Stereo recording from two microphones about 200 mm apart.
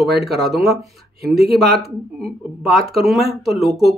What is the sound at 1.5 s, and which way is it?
Speech, 50° right (ahead or behind).